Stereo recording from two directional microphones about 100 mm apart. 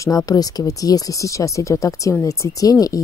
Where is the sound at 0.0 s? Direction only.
35° left (ahead or behind).